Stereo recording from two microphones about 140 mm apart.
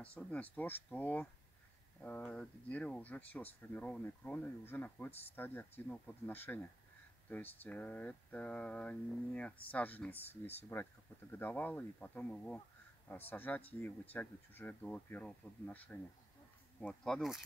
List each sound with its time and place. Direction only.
0.0 s speech: 10° left (ahead or behind)